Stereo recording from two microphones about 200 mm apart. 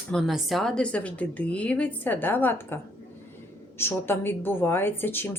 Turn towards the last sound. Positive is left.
turn(degrees=10)  # may be behind; listen again after turning